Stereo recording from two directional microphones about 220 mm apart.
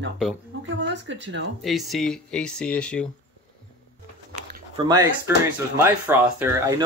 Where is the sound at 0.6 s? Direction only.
55° right (ahead or behind).